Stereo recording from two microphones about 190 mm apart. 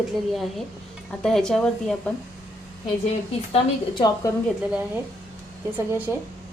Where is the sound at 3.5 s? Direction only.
25° left (ahead or behind).